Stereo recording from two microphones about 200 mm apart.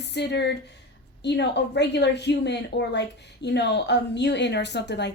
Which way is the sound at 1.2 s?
60° left (ahead or behind).